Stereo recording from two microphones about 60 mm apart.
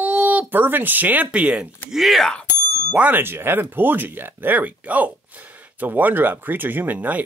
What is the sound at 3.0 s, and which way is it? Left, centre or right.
Speech, right.